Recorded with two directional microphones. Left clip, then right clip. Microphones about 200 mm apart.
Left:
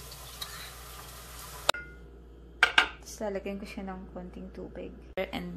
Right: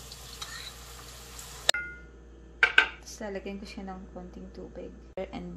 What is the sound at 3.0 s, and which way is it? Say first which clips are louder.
A woman's voice: left 3 dB; 5° left (ahead or behind).